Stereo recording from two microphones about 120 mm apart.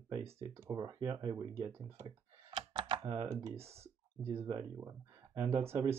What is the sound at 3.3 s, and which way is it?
Speech, 25° right (ahead or behind).